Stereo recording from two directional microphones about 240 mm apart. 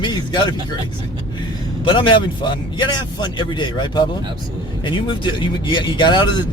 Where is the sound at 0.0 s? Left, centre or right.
Centre.